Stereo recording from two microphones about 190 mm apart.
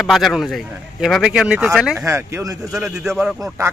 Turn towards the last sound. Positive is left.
turn(degrees=-5)  # may be behind; listen again after turning